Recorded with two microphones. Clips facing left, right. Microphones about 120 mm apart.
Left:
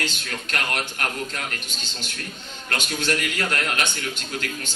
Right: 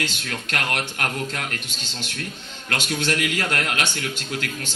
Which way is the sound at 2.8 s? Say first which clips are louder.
Right 2 dB; 65° right (ahead or behind).